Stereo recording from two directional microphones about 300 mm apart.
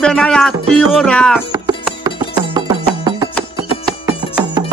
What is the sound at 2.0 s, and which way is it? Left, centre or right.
Music, centre.